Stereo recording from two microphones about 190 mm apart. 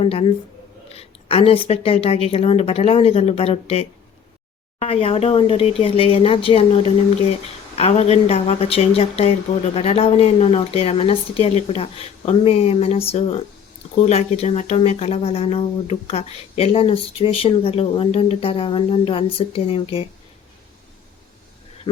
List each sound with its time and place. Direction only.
0.0 s speech: 30° left (ahead or behind)